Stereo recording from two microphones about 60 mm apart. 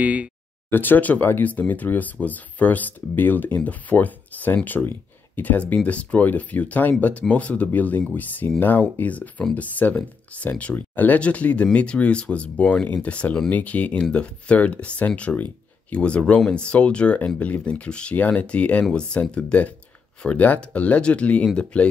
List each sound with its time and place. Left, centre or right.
0.0 s speech: right
0.7 s speech: left; by 21.9 s centre